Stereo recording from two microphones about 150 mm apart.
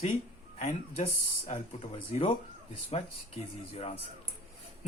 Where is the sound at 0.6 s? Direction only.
45° left (ahead or behind).